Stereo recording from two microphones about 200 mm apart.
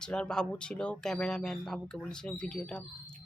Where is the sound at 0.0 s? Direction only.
5° left (ahead or behind).